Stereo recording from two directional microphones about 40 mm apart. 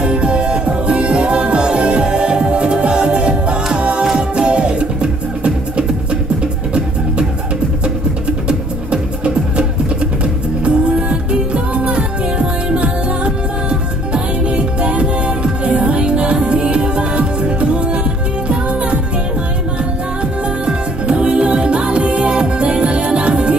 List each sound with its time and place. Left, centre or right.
0.0 s music: right
7.8 s music: right
20.6 s music: right